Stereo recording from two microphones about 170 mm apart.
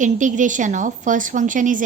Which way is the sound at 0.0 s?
50° right (ahead or behind).